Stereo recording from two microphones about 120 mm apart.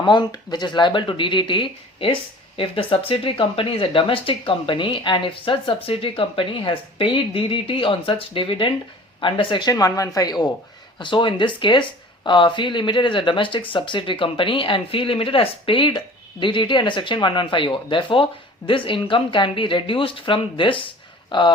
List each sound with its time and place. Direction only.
0.0 s speech: 40° left (ahead or behind)